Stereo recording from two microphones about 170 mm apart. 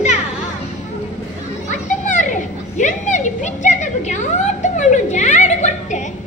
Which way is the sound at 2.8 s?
45° left (ahead or behind).